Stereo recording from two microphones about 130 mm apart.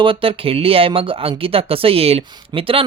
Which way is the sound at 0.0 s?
45° right (ahead or behind).